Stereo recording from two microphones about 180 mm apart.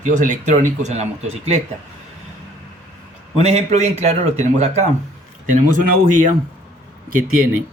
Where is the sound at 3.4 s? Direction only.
40° right (ahead or behind).